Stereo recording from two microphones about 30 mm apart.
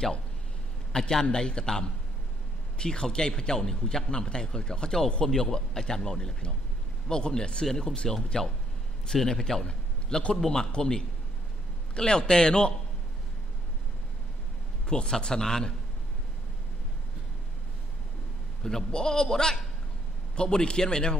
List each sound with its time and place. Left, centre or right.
0.9 s a man's voice: left
9.7 s a sound: left
10.3 s a man's voice: centre
12.3 s a man's voice: left
14.9 s a man's voice: left
18.6 s a man's voice: centre